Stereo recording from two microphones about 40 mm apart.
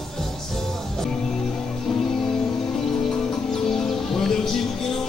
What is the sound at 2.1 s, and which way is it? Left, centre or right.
Music, centre.